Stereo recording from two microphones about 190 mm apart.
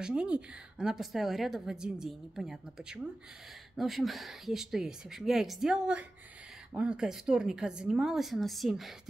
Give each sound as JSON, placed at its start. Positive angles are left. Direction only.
{"t": 0.0, "sound": "a woman's voice", "side_deg": -5}